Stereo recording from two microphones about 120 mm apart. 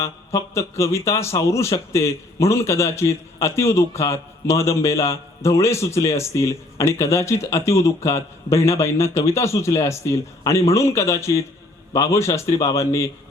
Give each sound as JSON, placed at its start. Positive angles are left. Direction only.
{"t": 0.0, "sound": "a man's voice", "side_deg": 25}